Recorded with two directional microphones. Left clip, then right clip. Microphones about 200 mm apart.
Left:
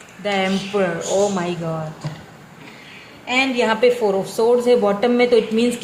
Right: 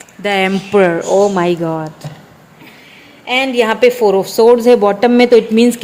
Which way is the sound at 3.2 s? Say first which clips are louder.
Right 5 dB; 45° right (ahead or behind).